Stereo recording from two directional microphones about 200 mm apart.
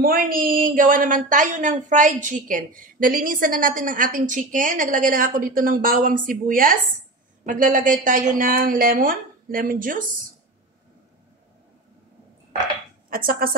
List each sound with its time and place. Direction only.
0.0 s a woman's voice: 45° right (ahead or behind)
13.1 s a woman's voice: 45° right (ahead or behind)